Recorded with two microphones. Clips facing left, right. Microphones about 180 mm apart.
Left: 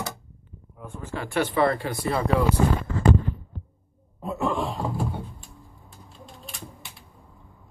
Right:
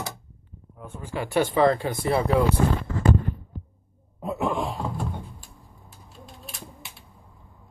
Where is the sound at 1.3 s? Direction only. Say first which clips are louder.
Right 2 dB; 20° right (ahead or behind).